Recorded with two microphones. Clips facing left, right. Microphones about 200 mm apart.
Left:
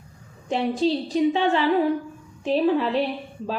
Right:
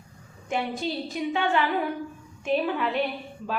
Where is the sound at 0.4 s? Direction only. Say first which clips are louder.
Left 7 dB; 30° left (ahead or behind).